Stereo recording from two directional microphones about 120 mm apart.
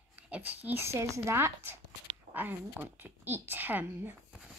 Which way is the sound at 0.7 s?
20° right (ahead or behind).